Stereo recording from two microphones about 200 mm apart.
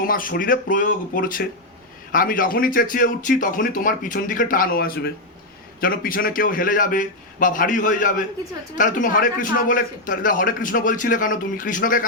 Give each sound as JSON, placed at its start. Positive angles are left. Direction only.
{"t": 0.0, "sound": "a man's voice", "side_deg": 45}